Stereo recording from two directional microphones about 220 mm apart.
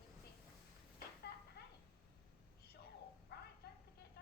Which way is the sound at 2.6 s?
45° left (ahead or behind).